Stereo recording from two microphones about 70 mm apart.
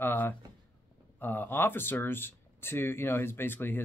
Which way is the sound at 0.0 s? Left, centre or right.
Left.